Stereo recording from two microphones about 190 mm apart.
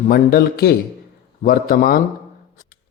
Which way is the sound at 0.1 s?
50° left (ahead or behind).